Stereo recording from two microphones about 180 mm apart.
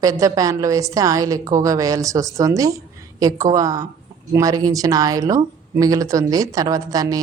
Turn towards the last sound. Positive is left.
turn(degrees=-20)  # may be behind; listen again after turning